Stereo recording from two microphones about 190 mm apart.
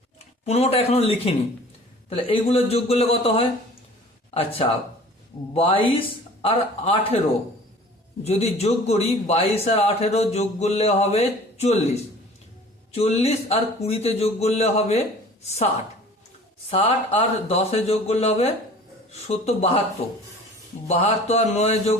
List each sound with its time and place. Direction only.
0.4 s a man's voice: 35° left (ahead or behind)
8.2 s a man's voice: 35° left (ahead or behind)
12.9 s a man's voice: 30° left (ahead or behind)
16.6 s a man's voice: 30° left (ahead or behind)
20.8 s a man's voice: 35° left (ahead or behind)